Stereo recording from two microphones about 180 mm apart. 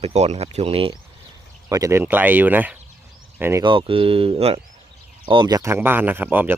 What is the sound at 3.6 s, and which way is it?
Speech, 30° right (ahead or behind).